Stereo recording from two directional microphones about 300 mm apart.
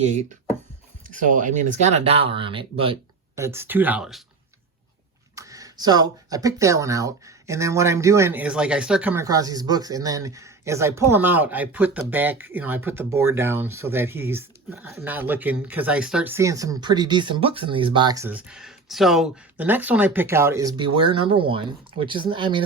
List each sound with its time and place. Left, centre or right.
0.0 s speech: right; by 4.2 s centre
5.3 s speech: centre